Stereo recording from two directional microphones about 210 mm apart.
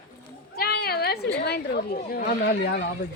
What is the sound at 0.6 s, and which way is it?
Cat, 50° left (ahead or behind).